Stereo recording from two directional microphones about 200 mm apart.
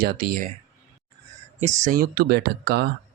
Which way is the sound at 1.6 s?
35° right (ahead or behind).